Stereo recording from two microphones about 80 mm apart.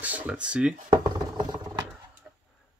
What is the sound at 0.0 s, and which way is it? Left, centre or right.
Speech, centre.